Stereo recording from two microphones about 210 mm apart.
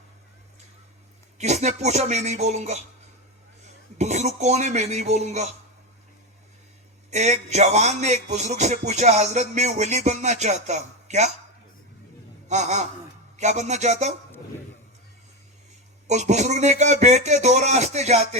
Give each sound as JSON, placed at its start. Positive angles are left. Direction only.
{"t": 1.4, "sound": "speech", "side_deg": -35}
{"t": 3.9, "sound": "dishes", "side_deg": -35}
{"t": 4.4, "sound": "speech", "side_deg": -35}
{"t": 7.1, "sound": "speech", "side_deg": -35}
{"t": 12.5, "sound": "speech", "side_deg": -35}
{"t": 16.0, "sound": "speech", "side_deg": -35}